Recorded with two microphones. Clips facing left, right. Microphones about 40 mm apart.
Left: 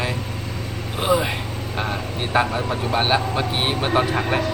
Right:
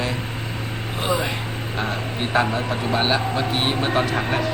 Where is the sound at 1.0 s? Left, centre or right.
Centre.